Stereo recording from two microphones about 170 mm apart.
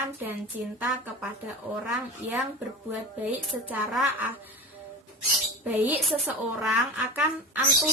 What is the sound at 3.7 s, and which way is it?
Speech, 10° right (ahead or behind).